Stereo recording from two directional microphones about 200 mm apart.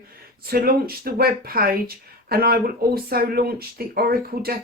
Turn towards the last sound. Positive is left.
turn(degrees=-50)  # may be behind; listen again after turning